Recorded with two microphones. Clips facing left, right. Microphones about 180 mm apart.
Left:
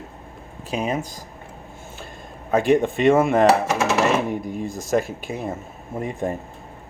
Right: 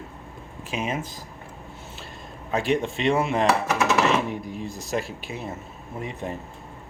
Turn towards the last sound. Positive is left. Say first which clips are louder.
# left 6 dB
turn(degrees=50)  # may be behind; listen again after turning